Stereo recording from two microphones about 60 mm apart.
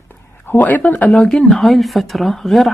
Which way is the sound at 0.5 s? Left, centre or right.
Left.